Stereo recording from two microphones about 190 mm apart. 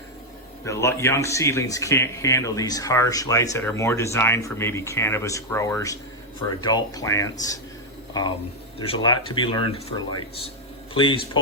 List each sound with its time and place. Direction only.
0.6 s speech: 15° left (ahead or behind)